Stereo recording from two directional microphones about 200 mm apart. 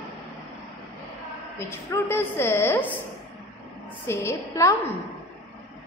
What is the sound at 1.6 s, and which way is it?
A woman's voice, 15° left (ahead or behind).